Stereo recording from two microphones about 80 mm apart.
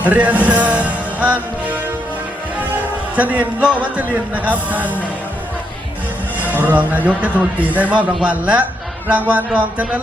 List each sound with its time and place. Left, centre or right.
0.0 s music: centre
2.6 s music: centre
3.6 s a man's voice: centre
6.5 s a man's voice: right